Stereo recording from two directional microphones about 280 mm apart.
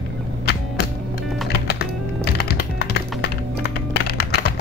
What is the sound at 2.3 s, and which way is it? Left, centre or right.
Music, left.